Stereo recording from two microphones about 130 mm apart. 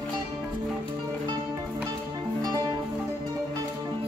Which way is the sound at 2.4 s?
25° right (ahead or behind).